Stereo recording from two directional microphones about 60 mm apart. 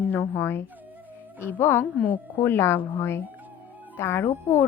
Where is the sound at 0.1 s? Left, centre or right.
Left.